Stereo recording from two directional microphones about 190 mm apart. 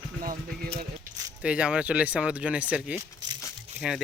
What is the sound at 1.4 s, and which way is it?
Speech, 5° right (ahead or behind).